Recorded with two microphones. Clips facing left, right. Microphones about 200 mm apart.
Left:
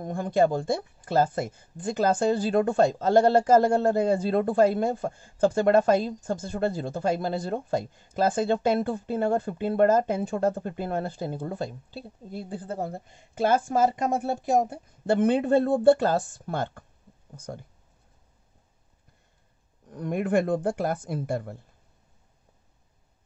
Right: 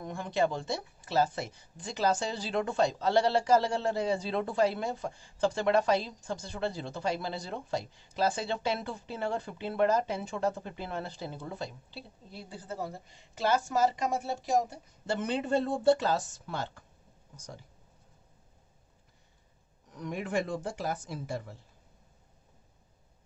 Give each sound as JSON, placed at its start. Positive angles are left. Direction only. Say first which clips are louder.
{"t": 0.0, "sound": "speech", "louder": "left 7 dB", "side_deg": 45}
{"t": 19.9, "sound": "speech", "louder": "left 8 dB", "side_deg": 50}